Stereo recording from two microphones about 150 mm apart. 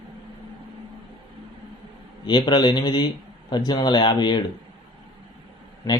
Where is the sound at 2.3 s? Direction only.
30° left (ahead or behind).